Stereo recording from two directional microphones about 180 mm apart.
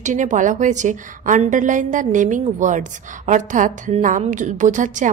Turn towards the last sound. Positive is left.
turn(degrees=-45)  # may be behind; listen again after turning